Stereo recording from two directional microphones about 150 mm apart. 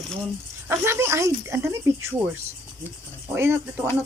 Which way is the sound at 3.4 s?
15° right (ahead or behind).